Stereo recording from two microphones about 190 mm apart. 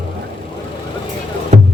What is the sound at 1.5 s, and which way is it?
Music, 40° right (ahead or behind).